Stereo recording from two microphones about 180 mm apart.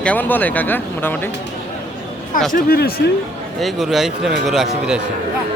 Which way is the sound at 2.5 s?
55° left (ahead or behind).